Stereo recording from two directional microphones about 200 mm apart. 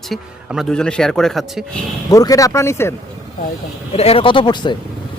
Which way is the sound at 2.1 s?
15° left (ahead or behind).